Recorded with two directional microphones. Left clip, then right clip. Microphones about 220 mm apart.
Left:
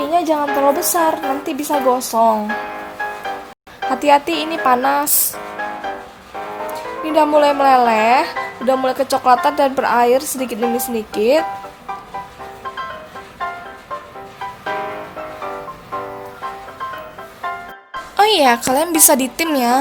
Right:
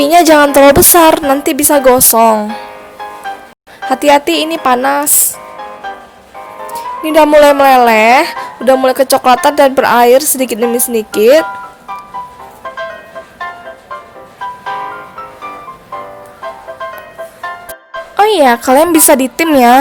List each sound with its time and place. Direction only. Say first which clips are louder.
0.0 s a woman's voice: right 11 dB; 45° right (ahead or behind)
3.8 s speech: right 5 dB; 25° right (ahead or behind)
6.7 s speech: right 7 dB; 30° right (ahead or behind)
18.2 s speech: right 5 dB; 20° right (ahead or behind)